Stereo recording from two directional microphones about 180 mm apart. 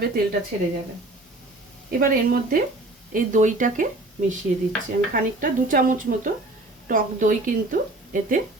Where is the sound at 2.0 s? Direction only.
50° right (ahead or behind).